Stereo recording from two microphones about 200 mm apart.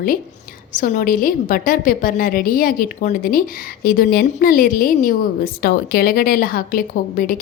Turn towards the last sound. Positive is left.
turn(degrees=45)  # may be behind; listen again after turning